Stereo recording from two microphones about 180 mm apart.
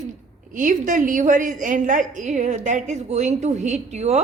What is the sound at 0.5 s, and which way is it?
A woman's voice, 45° right (ahead or behind).